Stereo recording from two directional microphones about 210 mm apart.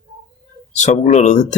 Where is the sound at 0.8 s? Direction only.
35° left (ahead or behind).